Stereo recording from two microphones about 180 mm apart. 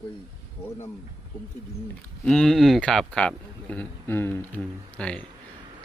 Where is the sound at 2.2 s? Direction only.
5° left (ahead or behind).